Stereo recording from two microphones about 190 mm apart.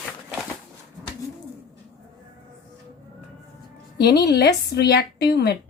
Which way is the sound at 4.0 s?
60° left (ahead or behind).